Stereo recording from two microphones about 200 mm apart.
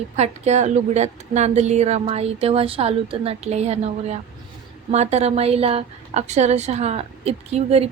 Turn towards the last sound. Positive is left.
turn(degrees=-30)  # may be behind; listen again after turning